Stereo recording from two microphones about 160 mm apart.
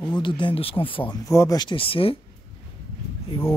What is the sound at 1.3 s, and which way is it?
Speech, 20° left (ahead or behind).